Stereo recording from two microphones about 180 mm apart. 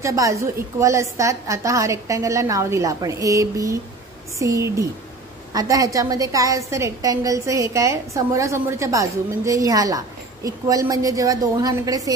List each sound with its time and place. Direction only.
0.0 s a woman's voice: 15° right (ahead or behind)